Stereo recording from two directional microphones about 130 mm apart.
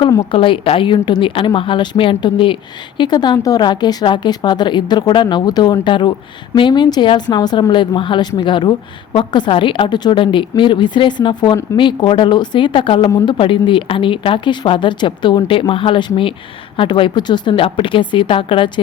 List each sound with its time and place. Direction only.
0.3 s a woman's voice: 40° left (ahead or behind)